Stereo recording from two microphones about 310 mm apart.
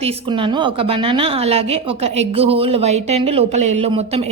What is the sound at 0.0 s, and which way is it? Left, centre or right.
A woman's voice, centre.